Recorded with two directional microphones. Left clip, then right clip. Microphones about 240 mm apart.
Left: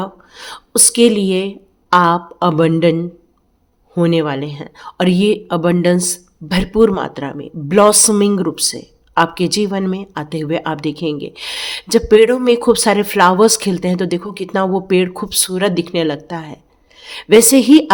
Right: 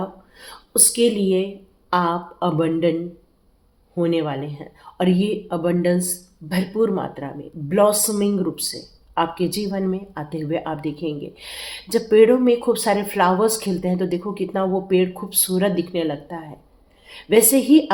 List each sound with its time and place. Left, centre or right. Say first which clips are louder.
0.0 s speech: left 5 dB; left
3.9 s speech: left 6 dB; left